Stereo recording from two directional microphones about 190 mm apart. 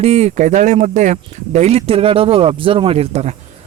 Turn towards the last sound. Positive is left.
turn(degrees=-35)  # may be behind; listen again after turning